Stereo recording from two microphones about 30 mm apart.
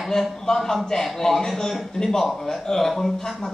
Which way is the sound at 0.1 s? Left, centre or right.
Centre.